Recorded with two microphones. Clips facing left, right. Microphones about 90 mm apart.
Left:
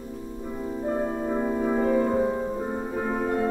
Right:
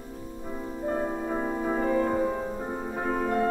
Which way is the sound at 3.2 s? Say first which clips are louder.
Even; 30° left (ahead or behind).